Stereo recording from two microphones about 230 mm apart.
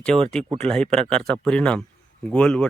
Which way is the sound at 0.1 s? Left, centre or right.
Right.